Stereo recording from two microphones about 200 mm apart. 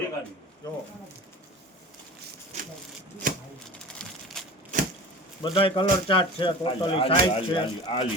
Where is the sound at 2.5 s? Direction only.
35° right (ahead or behind).